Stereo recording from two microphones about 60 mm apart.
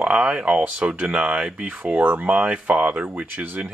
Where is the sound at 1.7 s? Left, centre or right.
Right.